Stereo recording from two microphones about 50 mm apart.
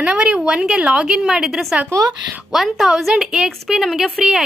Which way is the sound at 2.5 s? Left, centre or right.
Centre.